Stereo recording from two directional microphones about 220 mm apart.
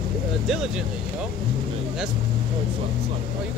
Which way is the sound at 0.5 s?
Centre (ahead or behind).